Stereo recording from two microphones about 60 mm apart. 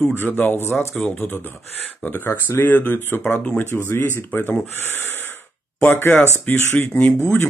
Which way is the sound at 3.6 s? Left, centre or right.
Left.